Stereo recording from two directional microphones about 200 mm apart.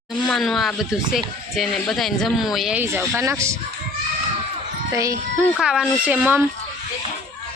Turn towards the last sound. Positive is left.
turn(degrees=-10)  # may be behind; listen again after turning